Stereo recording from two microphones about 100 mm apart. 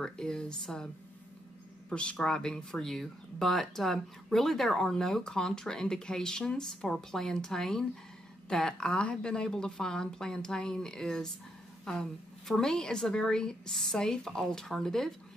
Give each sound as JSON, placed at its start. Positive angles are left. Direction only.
{"t": 0.0, "sound": "a woman's voice", "side_deg": 5}
{"t": 1.9, "sound": "a woman's voice", "side_deg": 10}